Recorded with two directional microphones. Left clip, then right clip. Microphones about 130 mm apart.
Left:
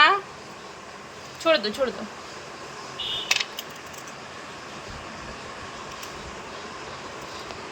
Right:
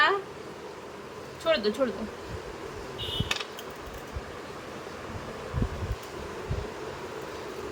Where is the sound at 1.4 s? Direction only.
30° left (ahead or behind).